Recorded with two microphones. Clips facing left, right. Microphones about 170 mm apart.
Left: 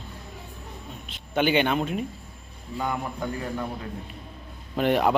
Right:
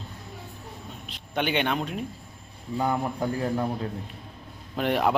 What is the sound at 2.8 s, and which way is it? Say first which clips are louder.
Speech: right 3 dB; 30° right (ahead or behind).